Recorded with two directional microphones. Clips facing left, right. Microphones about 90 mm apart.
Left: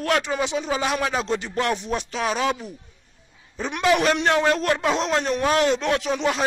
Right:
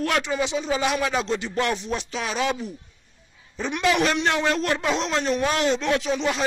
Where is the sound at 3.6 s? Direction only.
40° left (ahead or behind).